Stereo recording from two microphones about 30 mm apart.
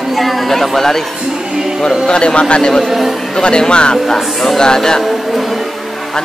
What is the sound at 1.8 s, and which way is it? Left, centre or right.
A man's voice, left.